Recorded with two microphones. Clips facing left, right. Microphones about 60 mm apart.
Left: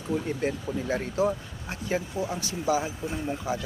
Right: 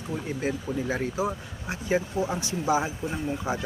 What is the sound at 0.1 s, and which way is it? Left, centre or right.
Speech, centre.